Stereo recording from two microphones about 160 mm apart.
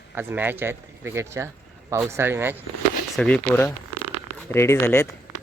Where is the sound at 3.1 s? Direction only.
5° left (ahead or behind).